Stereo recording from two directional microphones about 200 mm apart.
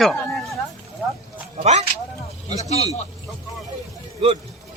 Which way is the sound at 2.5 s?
30° left (ahead or behind).